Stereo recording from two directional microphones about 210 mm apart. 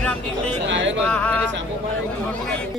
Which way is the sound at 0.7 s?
60° right (ahead or behind).